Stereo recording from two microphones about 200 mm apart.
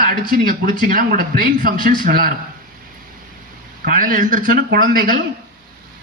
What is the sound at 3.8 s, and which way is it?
A man's voice, 40° right (ahead or behind).